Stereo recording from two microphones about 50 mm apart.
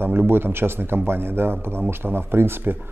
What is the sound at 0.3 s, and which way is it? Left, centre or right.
Speech, right.